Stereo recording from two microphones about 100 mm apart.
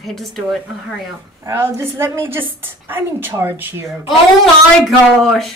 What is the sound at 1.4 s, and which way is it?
A woman's voice, 25° right (ahead or behind).